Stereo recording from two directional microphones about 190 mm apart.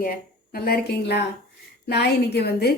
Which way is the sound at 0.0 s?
50° left (ahead or behind).